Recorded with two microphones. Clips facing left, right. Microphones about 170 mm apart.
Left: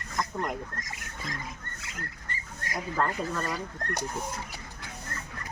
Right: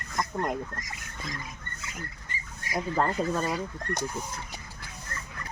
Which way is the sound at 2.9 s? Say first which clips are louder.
Right 3 dB; 25° right (ahead or behind).